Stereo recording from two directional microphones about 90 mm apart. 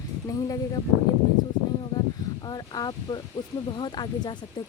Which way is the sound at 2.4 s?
50° left (ahead or behind).